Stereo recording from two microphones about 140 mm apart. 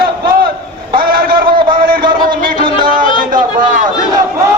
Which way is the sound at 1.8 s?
90° right.